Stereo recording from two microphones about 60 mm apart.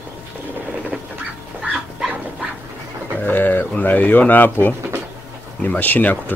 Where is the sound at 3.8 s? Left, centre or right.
Left.